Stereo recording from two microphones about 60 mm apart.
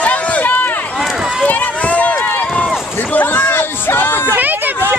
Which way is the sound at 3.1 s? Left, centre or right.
Left.